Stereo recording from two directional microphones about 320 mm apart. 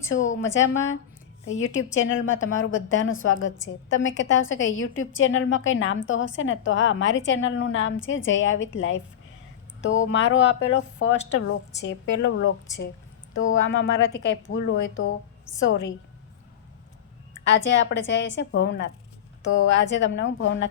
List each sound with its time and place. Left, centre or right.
0.1 s a woman's voice: left
17.4 s a woman's voice: left